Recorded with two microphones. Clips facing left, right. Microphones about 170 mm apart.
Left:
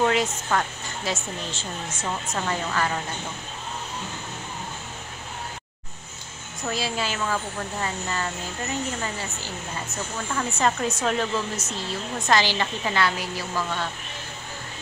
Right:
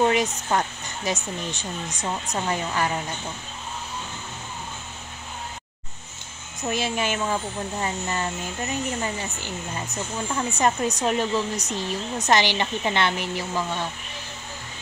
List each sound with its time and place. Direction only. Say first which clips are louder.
0.0 s speech: right 1 dB; 20° right (ahead or behind)
6.7 s speech: right 3 dB; 20° right (ahead or behind)